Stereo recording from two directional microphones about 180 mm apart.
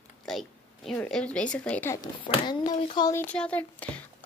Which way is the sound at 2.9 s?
20° left (ahead or behind).